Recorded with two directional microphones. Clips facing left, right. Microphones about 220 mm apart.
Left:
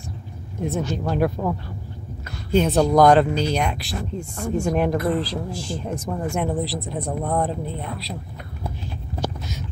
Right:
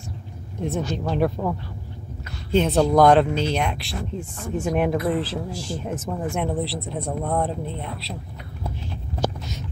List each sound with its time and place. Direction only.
0.6 s speech: 5° left (ahead or behind)